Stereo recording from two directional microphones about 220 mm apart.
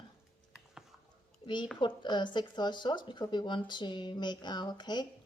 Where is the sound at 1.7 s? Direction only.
20° left (ahead or behind).